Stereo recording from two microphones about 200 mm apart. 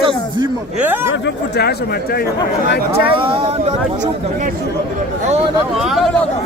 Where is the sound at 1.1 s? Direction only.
55° left (ahead or behind).